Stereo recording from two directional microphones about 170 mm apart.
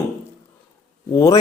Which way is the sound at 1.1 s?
15° left (ahead or behind).